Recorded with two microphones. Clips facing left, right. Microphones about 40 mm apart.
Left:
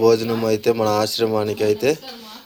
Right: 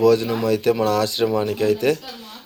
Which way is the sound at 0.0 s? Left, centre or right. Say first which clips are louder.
Left 1 dB; right.